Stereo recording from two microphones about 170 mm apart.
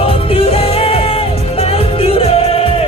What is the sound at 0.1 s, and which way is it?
Music, 35° left (ahead or behind).